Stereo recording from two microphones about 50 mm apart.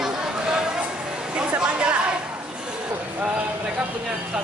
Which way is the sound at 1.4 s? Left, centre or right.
Right.